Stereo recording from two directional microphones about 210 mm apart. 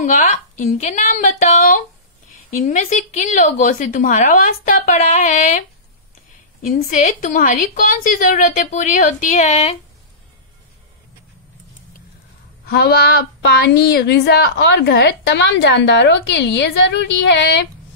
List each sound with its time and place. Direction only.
0.0 s a woman's voice: 35° left (ahead or behind)
6.6 s a woman's voice: 40° left (ahead or behind)
12.6 s speech: 50° left (ahead or behind)